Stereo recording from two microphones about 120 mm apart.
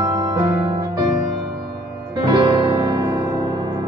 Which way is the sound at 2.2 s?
40° right (ahead or behind).